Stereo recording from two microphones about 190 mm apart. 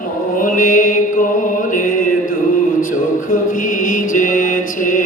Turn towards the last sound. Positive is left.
turn(degrees=45)  # may be behind; listen again after turning